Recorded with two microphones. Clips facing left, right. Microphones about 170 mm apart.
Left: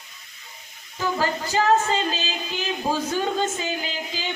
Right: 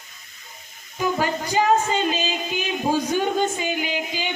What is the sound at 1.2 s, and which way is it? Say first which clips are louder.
Speech: even; 15° right (ahead or behind).